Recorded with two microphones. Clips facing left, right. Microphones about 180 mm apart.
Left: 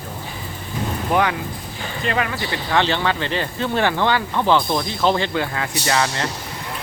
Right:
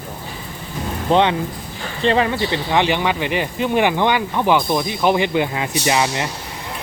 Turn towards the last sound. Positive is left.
turn(degrees=-15)  # may be behind; listen again after turning